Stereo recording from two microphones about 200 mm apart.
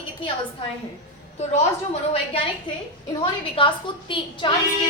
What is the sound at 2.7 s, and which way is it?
A woman's voice, 25° left (ahead or behind).